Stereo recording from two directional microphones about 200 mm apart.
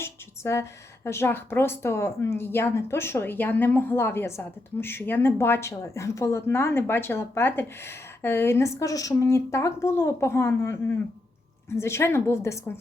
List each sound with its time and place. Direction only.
0.0 s speech: 15° left (ahead or behind)